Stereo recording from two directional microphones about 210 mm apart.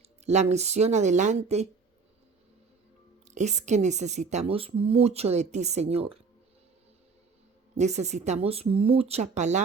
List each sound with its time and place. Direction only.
0.3 s speech: 30° right (ahead or behind)
3.2 s speech: 35° right (ahead or behind)
7.8 s speech: 30° right (ahead or behind)